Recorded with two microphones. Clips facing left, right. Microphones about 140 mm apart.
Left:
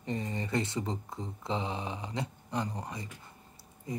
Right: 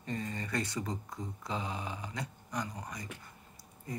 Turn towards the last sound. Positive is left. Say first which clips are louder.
# left 3 dB
turn(degrees=20)  # may be behind; listen again after turning